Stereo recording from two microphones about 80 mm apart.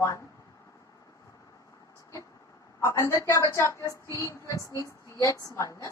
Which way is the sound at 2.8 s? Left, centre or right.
Left.